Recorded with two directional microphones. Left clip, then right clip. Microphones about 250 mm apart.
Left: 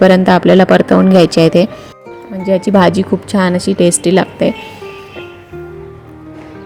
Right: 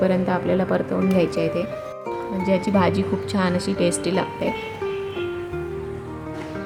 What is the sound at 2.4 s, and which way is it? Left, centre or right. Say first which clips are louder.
Speech: left 11 dB; left.